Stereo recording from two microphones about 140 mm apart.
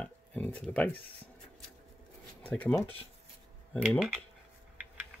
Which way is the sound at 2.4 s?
10° left (ahead or behind).